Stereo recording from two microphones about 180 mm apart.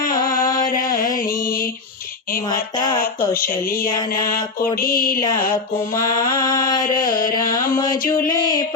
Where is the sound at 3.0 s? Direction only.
55° left (ahead or behind).